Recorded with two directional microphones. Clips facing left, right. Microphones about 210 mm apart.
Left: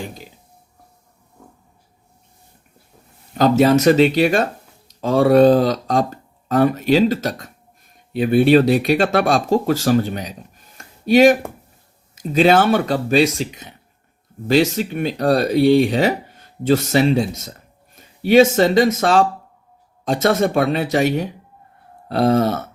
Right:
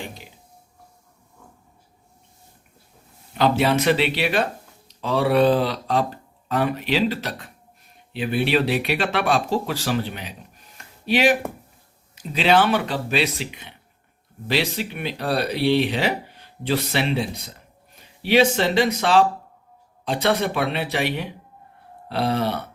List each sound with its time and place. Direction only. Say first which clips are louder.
3.3 s speech: left 6 dB; 40° left (ahead or behind)
10.8 s a sound: left 9 dB; 45° left (ahead or behind)
12.1 s speech: left 5 dB; 45° left (ahead or behind)